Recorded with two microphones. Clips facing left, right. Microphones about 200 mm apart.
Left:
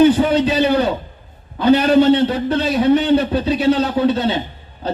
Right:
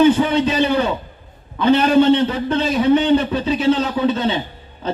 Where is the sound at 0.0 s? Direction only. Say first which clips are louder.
Left 1 dB; 35° left (ahead or behind).